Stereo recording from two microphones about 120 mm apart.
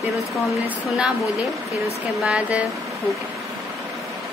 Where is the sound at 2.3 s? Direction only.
5° right (ahead or behind).